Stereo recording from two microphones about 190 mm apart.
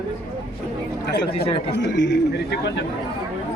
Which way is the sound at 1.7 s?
65° left (ahead or behind).